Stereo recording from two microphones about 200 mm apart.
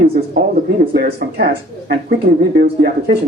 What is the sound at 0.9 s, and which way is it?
Speech, 50° right (ahead or behind).